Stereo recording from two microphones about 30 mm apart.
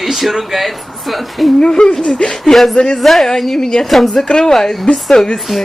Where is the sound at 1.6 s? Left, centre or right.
Left.